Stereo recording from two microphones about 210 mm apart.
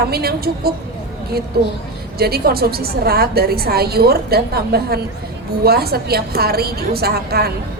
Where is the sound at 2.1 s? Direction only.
50° right (ahead or behind).